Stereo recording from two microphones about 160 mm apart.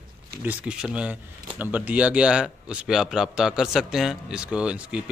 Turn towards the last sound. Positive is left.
turn(degrees=-5)  # may be behind; listen again after turning